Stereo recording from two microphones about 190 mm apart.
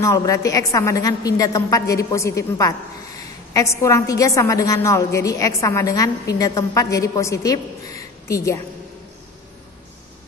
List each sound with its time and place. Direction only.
0.0 s a woman's voice: 15° left (ahead or behind)